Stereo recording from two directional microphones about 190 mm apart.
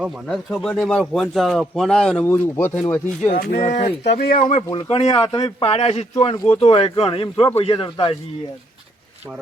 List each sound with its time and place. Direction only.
0.0 s speech: centre (ahead or behind)
3.3 s speech: 45° left (ahead or behind)
4.2 s speech: 45° left (ahead or behind)
4.7 s speech: 25° left (ahead or behind)
6.3 s speech: 20° left (ahead or behind)